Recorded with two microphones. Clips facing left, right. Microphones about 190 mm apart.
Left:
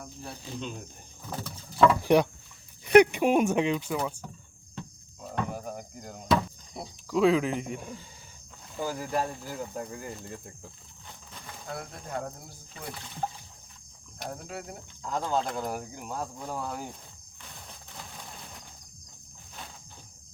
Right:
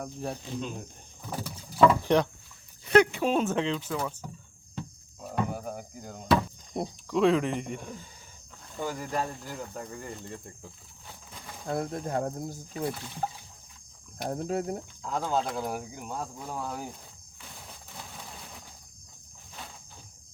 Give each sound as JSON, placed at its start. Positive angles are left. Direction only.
{"t": 0.0, "sound": "speech", "side_deg": -40}
{"t": 1.3, "sound": "vehicle", "side_deg": -10}
{"t": 2.0, "sound": "speech", "side_deg": 10}
{"t": 5.2, "sound": "a sound", "side_deg": -5}
{"t": 6.8, "sound": "speech", "side_deg": -45}
{"t": 7.1, "sound": "speech", "side_deg": 0}
{"t": 11.7, "sound": "speech", "side_deg": -40}
{"t": 12.9, "sound": "speech", "side_deg": -5}
{"t": 14.3, "sound": "speech", "side_deg": -40}
{"t": 15.0, "sound": "speech", "side_deg": 0}
{"t": 17.7, "sound": "a sound", "side_deg": 0}